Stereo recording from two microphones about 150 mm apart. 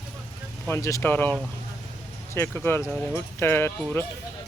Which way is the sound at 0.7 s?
20° left (ahead or behind).